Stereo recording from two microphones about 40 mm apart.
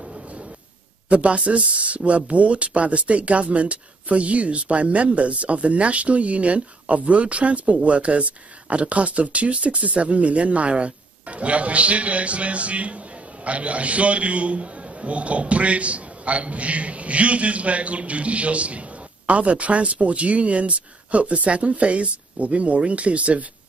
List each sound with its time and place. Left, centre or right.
1.0 s speech: right